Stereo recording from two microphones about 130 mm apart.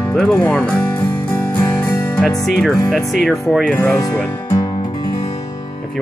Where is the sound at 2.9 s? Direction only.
Centre (ahead or behind).